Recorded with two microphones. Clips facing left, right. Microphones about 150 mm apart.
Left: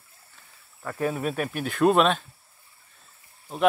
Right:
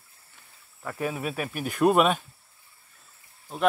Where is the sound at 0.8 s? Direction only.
10° right (ahead or behind).